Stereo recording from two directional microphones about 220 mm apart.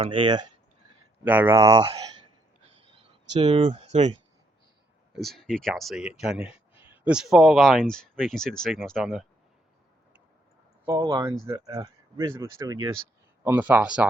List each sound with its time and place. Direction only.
0.0 s speech: 20° right (ahead or behind)
1.2 s speech: 10° right (ahead or behind)
2.6 s a sound: 25° right (ahead or behind)
3.4 s speech: 25° right (ahead or behind)
5.1 s speech: centre (ahead or behind)
10.8 s speech: 15° right (ahead or behind)